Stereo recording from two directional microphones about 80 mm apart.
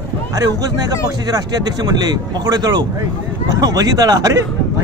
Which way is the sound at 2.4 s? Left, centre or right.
Right.